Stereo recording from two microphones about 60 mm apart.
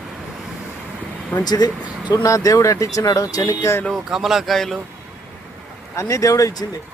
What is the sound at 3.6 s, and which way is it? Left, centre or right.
Speech, left.